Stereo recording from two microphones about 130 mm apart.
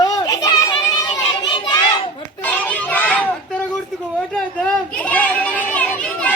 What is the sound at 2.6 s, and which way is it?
Children playing, 10° left (ahead or behind).